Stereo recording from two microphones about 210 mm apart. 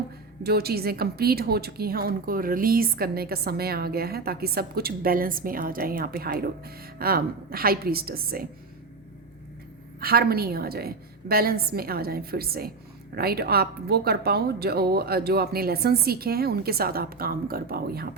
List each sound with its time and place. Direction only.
0.4 s a woman's voice: 50° right (ahead or behind)
10.0 s a woman's voice: 45° right (ahead or behind)